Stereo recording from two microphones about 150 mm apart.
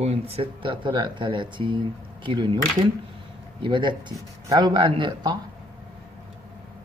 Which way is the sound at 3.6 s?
30° right (ahead or behind).